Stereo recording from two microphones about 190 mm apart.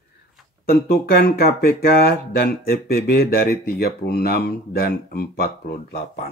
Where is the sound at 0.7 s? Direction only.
55° left (ahead or behind).